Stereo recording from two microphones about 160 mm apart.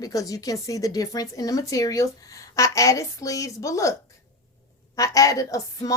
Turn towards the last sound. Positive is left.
turn(degrees=20)  # may be behind; listen again after turning